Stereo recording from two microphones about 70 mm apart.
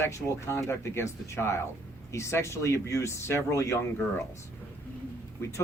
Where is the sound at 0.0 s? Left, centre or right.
Left.